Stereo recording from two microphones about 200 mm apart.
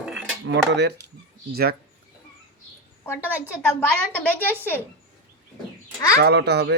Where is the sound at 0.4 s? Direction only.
60° right (ahead or behind).